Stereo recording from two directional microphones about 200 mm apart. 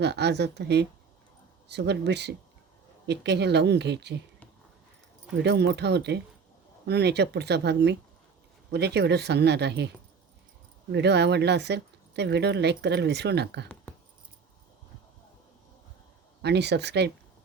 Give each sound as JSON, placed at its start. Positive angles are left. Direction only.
{"t": 0.0, "sound": "speech", "side_deg": -55}
{"t": 5.4, "sound": "speech", "side_deg": -55}
{"t": 10.9, "sound": "speech", "side_deg": -60}
{"t": 16.4, "sound": "speech", "side_deg": -55}